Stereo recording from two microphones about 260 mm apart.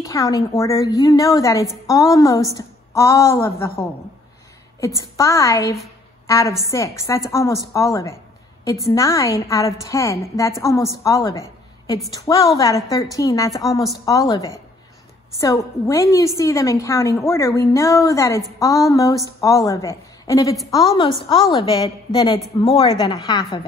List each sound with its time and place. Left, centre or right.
0.0 s a woman's voice: centre
5.1 s a woman's voice: centre
13.5 s a woman's voice: centre
14.0 s a woman's voice: centre